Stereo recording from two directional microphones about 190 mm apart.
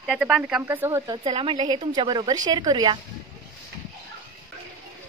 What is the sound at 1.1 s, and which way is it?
A woman's voice, 25° right (ahead or behind).